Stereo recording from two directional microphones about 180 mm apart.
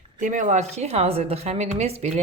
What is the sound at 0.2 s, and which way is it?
A woman's voice, 45° right (ahead or behind).